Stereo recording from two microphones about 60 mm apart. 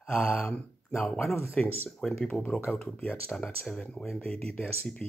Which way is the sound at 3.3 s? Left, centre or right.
Centre.